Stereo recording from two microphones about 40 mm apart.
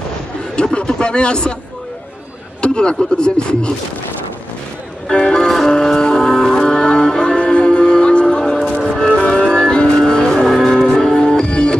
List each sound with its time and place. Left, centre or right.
0.7 s speech: left
2.6 s speech: left
5.1 s speech: centre
5.5 s music: centre
10.5 s music: centre; by 11.7 s left